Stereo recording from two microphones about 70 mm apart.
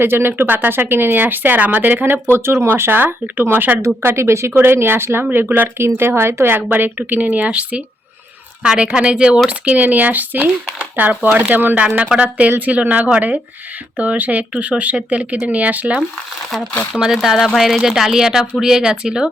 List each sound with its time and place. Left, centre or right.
0.0 s speech: right
4.0 s speech: right
6.6 s speech: right
16.9 s speech: centre